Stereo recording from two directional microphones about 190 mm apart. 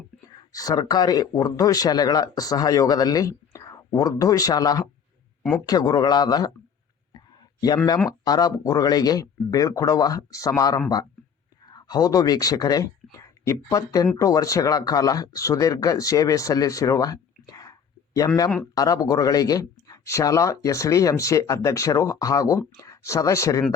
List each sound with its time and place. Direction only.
0.3 s speech: 20° left (ahead or behind)
5.4 s a sound: 5° left (ahead or behind)
5.6 s speech: 20° left (ahead or behind)
8.2 s speech: 20° left (ahead or behind)